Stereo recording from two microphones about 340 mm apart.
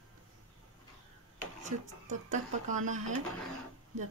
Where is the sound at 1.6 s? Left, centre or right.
Right.